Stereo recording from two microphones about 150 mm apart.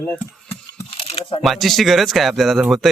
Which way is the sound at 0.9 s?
40° left (ahead or behind).